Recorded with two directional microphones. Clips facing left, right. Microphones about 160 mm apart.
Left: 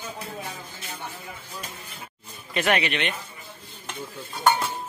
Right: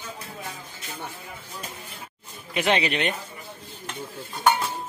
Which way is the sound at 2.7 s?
35° right (ahead or behind).